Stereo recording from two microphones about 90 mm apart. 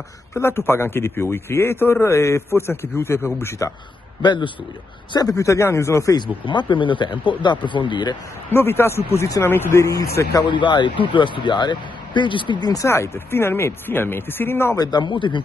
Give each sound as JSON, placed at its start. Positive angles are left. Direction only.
{"t": 0.3, "sound": "a man's voice", "side_deg": 30}
{"t": 4.2, "sound": "speech", "side_deg": 60}
{"t": 5.1, "sound": "speech", "side_deg": 40}
{"t": 6.1, "sound": "speech", "side_deg": 60}
{"t": 8.5, "sound": "a man's voice", "side_deg": 25}
{"t": 10.4, "sound": "speech", "side_deg": 60}
{"t": 12.7, "sound": "a man's voice", "side_deg": 30}
{"t": 14.8, "sound": "speech", "side_deg": 50}